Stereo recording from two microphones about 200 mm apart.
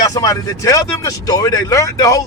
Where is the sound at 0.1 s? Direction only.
15° left (ahead or behind).